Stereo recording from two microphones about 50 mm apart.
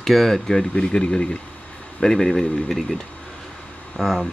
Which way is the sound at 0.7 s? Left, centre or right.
Left.